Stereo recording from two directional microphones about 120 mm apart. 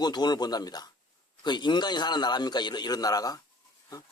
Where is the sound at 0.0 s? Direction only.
35° left (ahead or behind).